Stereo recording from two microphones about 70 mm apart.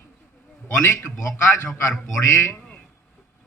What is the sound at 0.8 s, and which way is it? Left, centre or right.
Speech, left.